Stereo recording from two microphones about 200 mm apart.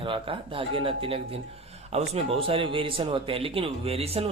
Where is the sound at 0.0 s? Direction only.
25° right (ahead or behind).